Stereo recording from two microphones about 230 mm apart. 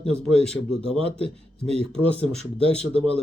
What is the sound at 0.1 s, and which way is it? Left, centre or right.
Speech, right.